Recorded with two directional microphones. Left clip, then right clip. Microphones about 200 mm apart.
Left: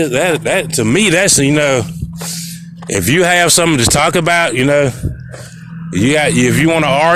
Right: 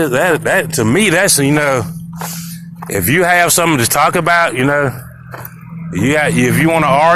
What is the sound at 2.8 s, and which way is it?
Speech, 55° left (ahead or behind).